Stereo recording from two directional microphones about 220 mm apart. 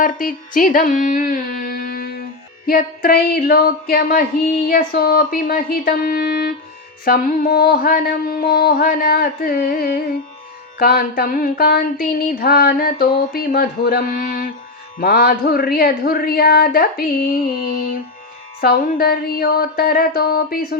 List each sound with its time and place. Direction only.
0.0 s speech: 40° left (ahead or behind)